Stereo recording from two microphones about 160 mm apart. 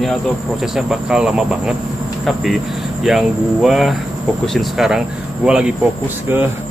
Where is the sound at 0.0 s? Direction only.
Centre (ahead or behind).